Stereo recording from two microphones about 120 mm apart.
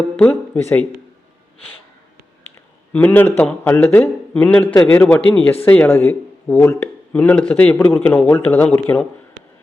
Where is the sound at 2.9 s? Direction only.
15° left (ahead or behind).